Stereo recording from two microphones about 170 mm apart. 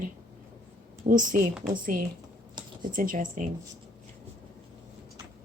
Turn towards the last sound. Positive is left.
turn(degrees=-50)  # may be behind; listen again after turning